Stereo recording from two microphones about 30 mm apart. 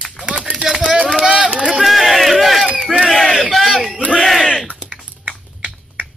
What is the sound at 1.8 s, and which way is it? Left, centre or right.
Crowd, centre.